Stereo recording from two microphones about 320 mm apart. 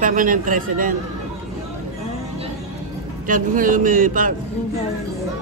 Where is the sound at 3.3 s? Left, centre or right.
Right.